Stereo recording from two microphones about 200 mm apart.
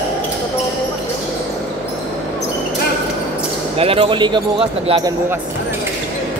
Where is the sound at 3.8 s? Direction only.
25° right (ahead or behind).